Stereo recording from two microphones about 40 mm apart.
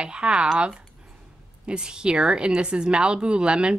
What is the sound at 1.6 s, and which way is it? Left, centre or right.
A woman's voice, right.